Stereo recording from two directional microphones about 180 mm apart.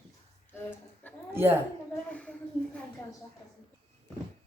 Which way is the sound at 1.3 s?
10° right (ahead or behind).